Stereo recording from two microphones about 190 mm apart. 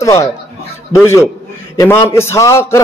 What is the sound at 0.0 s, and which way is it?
A man's voice, 15° left (ahead or behind).